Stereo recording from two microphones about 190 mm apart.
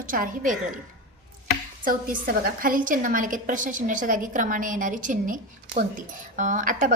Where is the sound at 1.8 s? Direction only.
45° right (ahead or behind).